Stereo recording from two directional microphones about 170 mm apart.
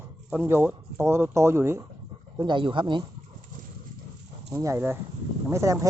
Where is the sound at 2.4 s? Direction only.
30° right (ahead or behind).